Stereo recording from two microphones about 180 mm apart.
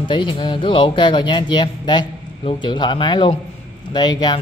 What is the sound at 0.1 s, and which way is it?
A man's voice, 25° left (ahead or behind).